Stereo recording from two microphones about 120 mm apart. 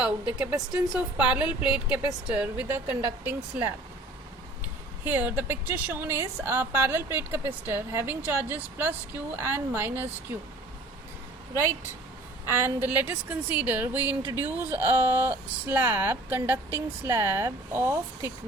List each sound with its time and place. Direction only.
0.0 s a woman's voice: 10° right (ahead or behind)
5.0 s a woman's voice: 15° right (ahead or behind)
12.5 s a woman's voice: 20° right (ahead or behind)
13.9 s speech: 35° left (ahead or behind)
14.3 s a woman's voice: 15° right (ahead or behind)